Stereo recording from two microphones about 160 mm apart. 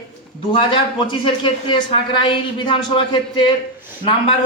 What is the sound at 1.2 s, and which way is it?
Speech, 30° left (ahead or behind).